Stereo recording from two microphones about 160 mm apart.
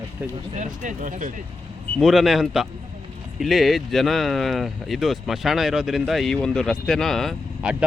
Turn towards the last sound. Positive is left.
turn(degrees=0)  # may be behind; listen again after turning